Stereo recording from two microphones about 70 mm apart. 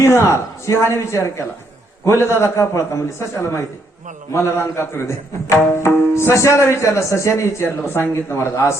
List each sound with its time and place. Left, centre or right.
0.0 s a man's voice: left